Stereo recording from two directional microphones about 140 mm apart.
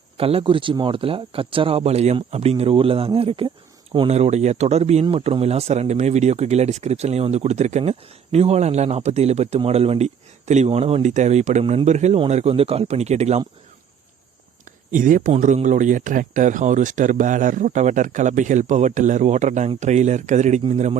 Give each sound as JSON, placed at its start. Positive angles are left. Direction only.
{"t": 0.2, "sound": "speech", "side_deg": -40}
{"t": 4.1, "sound": "speech", "side_deg": -50}
{"t": 11.6, "sound": "speech", "side_deg": -40}
{"t": 11.9, "sound": "speech", "side_deg": -55}
{"t": 14.9, "sound": "speech", "side_deg": -65}
{"t": 15.3, "sound": "speech", "side_deg": -55}